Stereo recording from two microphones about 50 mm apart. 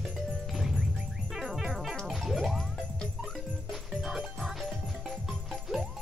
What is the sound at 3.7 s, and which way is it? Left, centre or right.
Music, centre.